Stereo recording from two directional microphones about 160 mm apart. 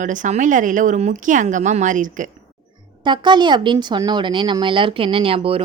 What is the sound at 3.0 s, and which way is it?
A woman's voice, 30° right (ahead or behind).